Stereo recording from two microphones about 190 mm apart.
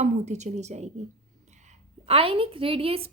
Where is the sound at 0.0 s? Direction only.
35° right (ahead or behind).